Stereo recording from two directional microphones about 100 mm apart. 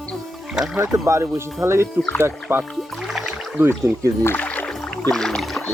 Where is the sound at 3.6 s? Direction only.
25° right (ahead or behind).